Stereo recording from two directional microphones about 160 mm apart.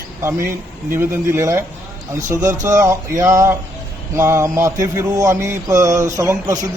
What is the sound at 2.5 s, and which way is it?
Mantra, 15° right (ahead or behind).